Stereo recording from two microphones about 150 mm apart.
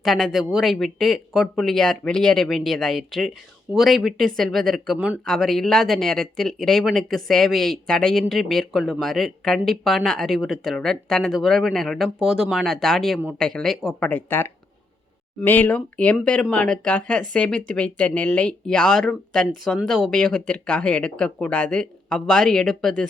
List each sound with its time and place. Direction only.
0.0 s speech: centre (ahead or behind)
4.9 s speech: 10° right (ahead or behind)
5.2 s speech: centre (ahead or behind)